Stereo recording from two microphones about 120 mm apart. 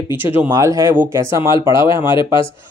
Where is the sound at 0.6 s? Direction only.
25° right (ahead or behind).